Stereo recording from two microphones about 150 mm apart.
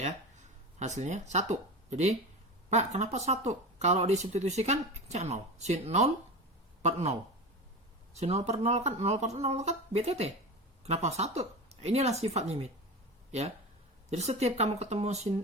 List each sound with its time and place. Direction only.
0.0 s speech: 50° right (ahead or behind)
14.1 s speech: 45° right (ahead or behind)